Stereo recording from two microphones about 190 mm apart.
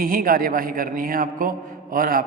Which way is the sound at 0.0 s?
45° right (ahead or behind).